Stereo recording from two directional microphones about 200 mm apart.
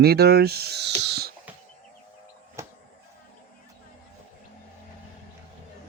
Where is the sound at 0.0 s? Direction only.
50° right (ahead or behind).